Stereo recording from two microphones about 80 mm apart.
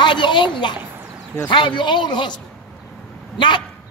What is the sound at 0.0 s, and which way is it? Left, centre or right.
Speech, left.